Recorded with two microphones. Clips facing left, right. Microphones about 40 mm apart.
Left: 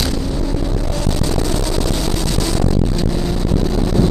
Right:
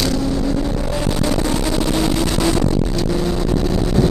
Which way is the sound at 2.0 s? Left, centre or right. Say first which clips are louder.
Right 3 dB; centre.